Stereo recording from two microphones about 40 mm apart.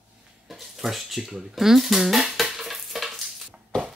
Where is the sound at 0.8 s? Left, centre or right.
Centre.